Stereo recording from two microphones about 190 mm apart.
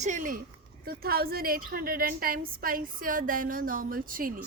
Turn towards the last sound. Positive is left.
turn(degrees=-45)  # may be behind; listen again after turning